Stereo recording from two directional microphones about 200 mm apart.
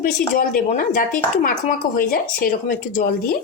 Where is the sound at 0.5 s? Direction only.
40° left (ahead or behind).